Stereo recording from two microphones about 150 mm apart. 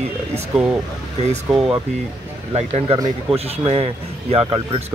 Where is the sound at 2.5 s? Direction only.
45° right (ahead or behind).